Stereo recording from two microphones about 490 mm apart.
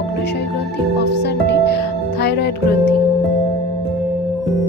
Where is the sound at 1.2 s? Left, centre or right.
Left.